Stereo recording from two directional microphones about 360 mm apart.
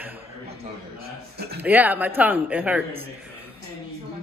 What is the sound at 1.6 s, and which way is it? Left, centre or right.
Speech, centre.